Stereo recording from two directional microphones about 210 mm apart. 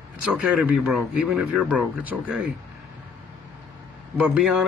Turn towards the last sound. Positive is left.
turn(degrees=-5)  # may be behind; listen again after turning